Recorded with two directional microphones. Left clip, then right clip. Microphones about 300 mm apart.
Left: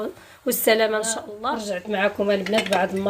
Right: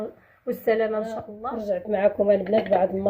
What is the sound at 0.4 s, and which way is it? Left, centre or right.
A woman's voice, left.